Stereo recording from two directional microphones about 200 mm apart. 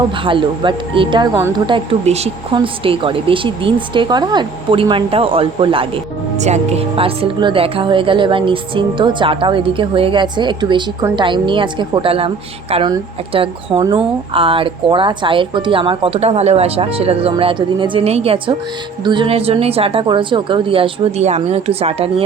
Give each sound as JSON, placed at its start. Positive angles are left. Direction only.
{"t": 0.3, "sound": "speech", "side_deg": -25}